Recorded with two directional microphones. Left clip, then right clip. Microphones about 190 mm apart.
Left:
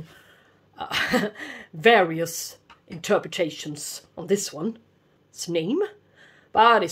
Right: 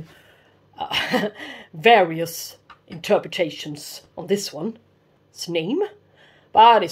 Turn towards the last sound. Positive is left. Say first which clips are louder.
# right 4 dB
turn(degrees=10)  # may be behind; listen again after turning